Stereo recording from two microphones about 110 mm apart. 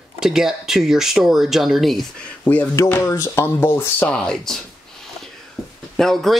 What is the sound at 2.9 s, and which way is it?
Music, 20° left (ahead or behind).